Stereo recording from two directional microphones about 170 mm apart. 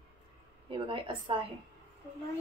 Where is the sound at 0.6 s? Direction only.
30° right (ahead or behind).